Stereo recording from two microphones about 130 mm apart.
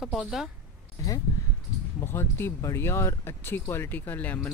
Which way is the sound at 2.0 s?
20° left (ahead or behind).